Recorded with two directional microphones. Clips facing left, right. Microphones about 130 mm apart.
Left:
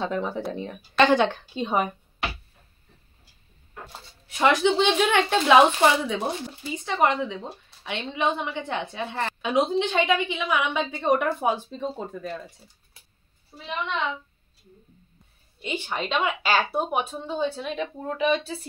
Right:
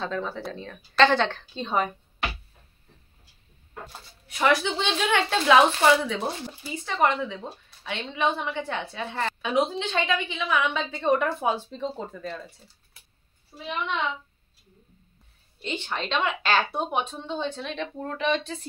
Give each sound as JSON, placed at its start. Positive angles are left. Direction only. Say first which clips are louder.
{"t": 0.0, "sound": "a woman's voice", "louder": "left 3 dB", "side_deg": 15}
{"t": 4.3, "sound": "a woman's voice", "louder": "left 3 dB", "side_deg": 20}
{"t": 15.6, "sound": "a woman's voice", "louder": "left 2 dB", "side_deg": 10}